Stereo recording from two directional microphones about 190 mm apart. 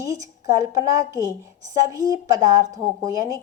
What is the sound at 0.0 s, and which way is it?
A woman's voice, 15° right (ahead or behind).